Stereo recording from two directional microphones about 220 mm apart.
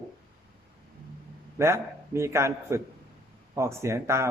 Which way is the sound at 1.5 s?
10° right (ahead or behind).